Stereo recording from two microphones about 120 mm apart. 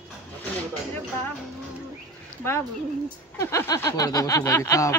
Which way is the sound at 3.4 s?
25° left (ahead or behind).